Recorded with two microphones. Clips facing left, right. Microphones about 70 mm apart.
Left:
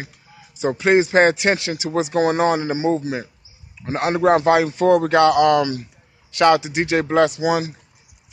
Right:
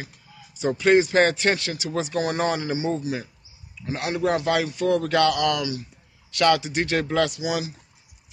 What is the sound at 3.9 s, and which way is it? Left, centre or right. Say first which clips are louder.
A man's voice: left 7 dB; left.